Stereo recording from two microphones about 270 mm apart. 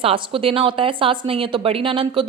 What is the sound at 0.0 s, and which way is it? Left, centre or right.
A woman's voice, centre.